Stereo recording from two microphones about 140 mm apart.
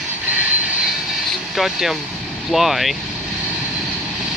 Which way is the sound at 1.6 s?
Centre (ahead or behind).